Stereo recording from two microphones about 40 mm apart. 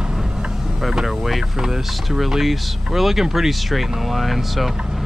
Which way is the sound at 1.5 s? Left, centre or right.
Centre.